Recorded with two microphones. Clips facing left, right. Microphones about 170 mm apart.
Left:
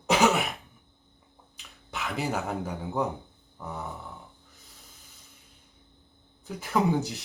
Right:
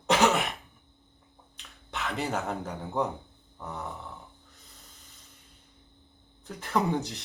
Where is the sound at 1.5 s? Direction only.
Centre (ahead or behind).